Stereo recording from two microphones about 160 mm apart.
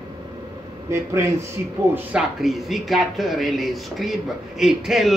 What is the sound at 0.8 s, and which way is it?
Speech, 15° right (ahead or behind).